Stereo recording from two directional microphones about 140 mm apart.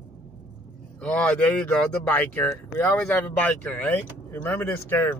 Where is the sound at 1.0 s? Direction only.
10° left (ahead or behind).